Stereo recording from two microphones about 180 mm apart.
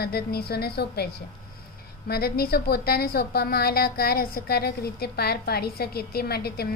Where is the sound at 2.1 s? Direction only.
60° left (ahead or behind).